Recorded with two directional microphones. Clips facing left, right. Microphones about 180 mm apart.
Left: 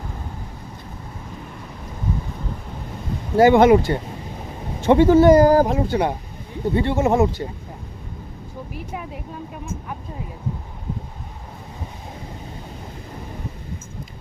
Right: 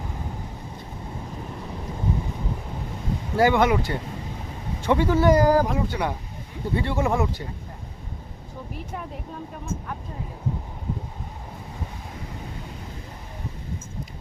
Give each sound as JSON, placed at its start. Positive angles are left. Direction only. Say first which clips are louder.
{"t": 3.3, "sound": "speech", "louder": "left 7 dB", "side_deg": 25}
{"t": 8.9, "sound": "speech", "louder": "left 2 dB", "side_deg": 5}